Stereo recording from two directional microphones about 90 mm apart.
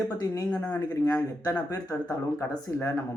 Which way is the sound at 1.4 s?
35° left (ahead or behind).